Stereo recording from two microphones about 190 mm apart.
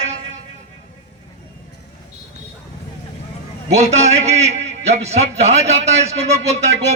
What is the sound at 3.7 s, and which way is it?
A man's voice, 35° right (ahead or behind).